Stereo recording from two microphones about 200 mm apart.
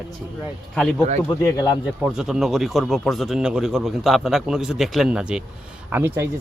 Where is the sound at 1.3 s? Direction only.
20° left (ahead or behind).